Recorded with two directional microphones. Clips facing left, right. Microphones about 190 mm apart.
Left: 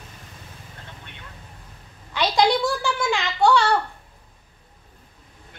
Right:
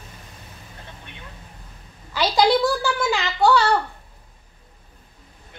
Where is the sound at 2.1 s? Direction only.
5° right (ahead or behind).